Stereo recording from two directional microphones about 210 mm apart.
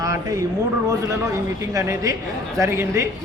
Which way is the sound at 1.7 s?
15° right (ahead or behind).